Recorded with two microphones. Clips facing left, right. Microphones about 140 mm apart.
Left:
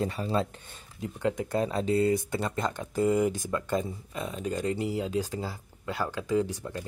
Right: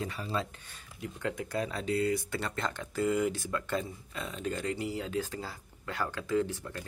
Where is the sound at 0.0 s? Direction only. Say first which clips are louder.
Left 6 dB; 40° left (ahead or behind).